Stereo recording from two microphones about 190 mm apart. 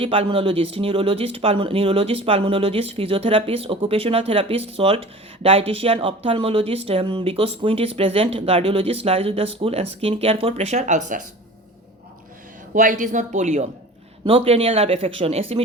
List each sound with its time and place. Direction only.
0.0 s speech: 30° right (ahead or behind)
12.7 s speech: 45° right (ahead or behind)